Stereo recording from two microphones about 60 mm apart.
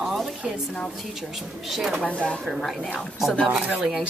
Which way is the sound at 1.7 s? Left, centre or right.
Centre.